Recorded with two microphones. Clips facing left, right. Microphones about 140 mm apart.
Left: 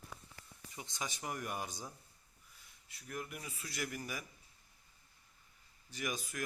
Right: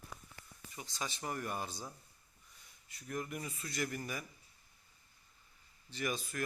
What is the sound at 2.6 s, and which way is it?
A man's voice, centre (ahead or behind).